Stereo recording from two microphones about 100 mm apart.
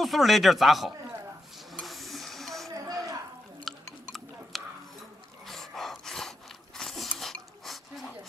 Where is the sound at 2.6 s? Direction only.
35° right (ahead or behind).